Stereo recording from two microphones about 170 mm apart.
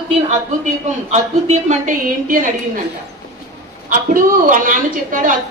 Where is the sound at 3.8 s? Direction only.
50° right (ahead or behind).